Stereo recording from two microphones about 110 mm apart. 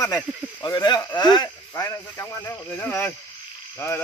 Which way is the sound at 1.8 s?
25° left (ahead or behind).